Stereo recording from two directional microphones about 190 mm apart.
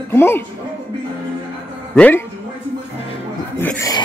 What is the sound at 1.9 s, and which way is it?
Speech, 10° left (ahead or behind).